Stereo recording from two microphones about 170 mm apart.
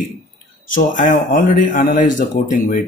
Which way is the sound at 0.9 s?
50° left (ahead or behind).